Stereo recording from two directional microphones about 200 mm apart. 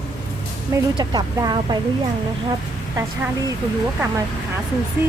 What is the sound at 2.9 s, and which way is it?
Speech, 15° right (ahead or behind).